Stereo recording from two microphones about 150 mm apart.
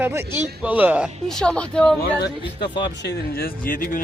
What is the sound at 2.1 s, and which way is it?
Speech, 90° left.